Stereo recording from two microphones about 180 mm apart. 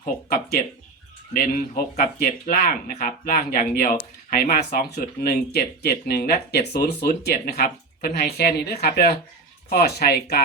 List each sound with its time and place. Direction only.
1.3 s speech: 50° left (ahead or behind)